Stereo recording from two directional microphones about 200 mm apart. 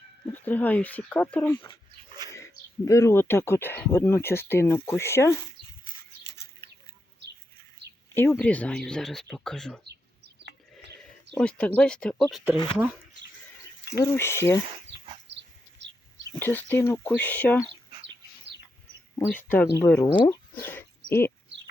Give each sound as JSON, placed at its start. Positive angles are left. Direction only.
{"t": 0.3, "sound": "speech", "side_deg": 10}
{"t": 6.3, "sound": "livestock", "side_deg": 15}
{"t": 8.1, "sound": "speech", "side_deg": 10}
{"t": 11.3, "sound": "speech", "side_deg": 5}
{"t": 14.0, "sound": "speech", "side_deg": 10}
{"t": 15.3, "sound": "bird", "side_deg": -60}
{"t": 16.4, "sound": "speech", "side_deg": 10}
{"t": 19.3, "sound": "speech", "side_deg": 10}
{"t": 20.1, "sound": "speech", "side_deg": 25}
{"t": 20.6, "sound": "speech", "side_deg": 10}